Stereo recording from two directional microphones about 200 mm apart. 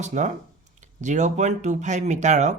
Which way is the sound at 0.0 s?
35° right (ahead or behind).